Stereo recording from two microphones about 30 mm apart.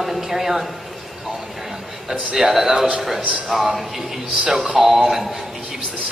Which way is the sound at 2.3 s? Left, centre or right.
Centre.